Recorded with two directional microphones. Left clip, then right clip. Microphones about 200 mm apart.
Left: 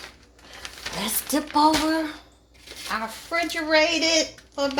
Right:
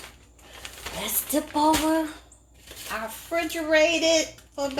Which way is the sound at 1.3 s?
50° left (ahead or behind).